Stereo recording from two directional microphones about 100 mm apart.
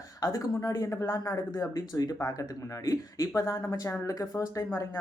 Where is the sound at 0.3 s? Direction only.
35° left (ahead or behind).